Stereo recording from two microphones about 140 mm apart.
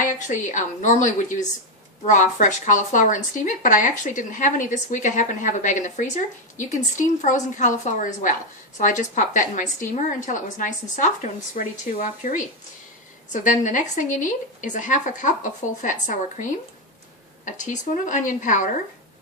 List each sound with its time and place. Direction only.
0.0 s a woman's voice: 60° left (ahead or behind)